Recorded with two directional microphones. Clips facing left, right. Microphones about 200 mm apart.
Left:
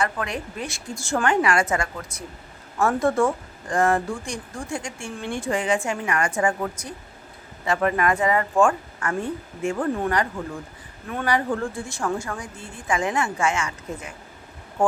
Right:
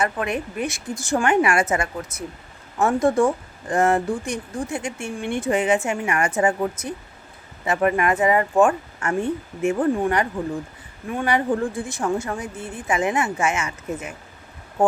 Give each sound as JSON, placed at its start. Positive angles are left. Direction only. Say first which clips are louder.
{"t": 0.0, "sound": "a woman's voice", "louder": "right 3 dB", "side_deg": -20}